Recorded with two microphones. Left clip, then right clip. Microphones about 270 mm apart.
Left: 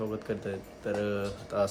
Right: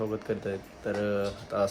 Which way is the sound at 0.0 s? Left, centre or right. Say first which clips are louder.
Right 3 dB; centre.